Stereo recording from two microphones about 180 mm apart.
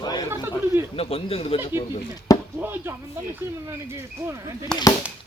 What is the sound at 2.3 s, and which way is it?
Chop, 20° left (ahead or behind).